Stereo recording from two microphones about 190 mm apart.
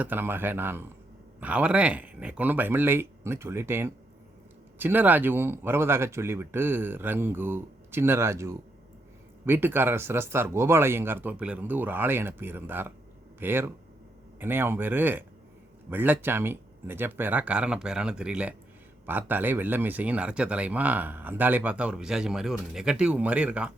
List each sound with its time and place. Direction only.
0.0 s speech: 10° right (ahead or behind)